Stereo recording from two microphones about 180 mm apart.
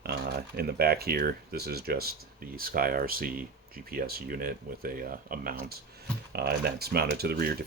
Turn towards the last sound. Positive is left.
turn(degrees=-60)  # may be behind; listen again after turning